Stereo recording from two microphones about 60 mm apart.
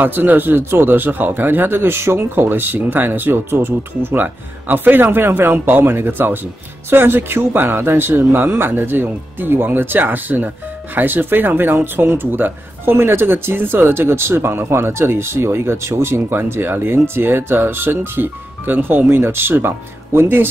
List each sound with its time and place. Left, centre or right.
0.0 s speech: right